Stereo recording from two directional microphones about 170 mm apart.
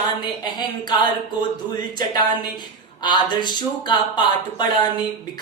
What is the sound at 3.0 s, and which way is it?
Music, 25° left (ahead or behind).